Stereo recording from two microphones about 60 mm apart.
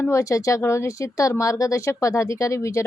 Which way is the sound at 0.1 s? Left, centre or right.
Left.